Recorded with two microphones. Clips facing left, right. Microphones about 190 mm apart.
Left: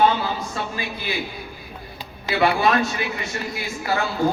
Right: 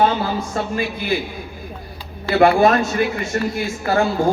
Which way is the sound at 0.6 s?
50° right (ahead or behind).